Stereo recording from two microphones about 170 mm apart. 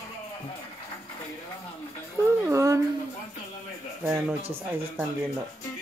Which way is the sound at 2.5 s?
20° right (ahead or behind).